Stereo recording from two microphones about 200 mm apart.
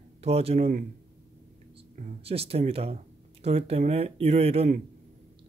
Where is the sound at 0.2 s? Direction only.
30° right (ahead or behind).